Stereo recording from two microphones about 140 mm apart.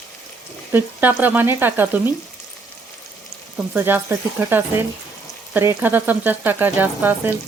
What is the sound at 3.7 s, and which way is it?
Speech, 15° right (ahead or behind).